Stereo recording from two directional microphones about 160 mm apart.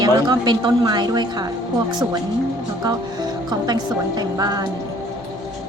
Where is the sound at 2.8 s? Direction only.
25° right (ahead or behind).